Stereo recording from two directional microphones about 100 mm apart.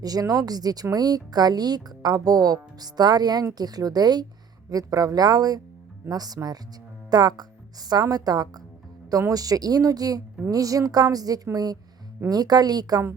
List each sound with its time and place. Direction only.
0.0 s speech: 40° right (ahead or behind)